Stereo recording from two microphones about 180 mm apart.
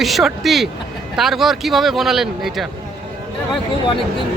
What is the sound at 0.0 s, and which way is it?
Speech, centre (ahead or behind).